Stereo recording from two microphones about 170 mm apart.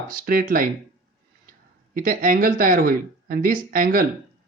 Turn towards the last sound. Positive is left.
turn(degrees=-55)  # may be behind; listen again after turning